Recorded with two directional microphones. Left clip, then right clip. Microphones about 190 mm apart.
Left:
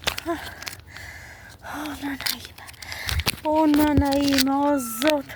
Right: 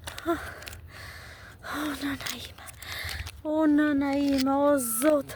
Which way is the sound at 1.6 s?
20° right (ahead or behind).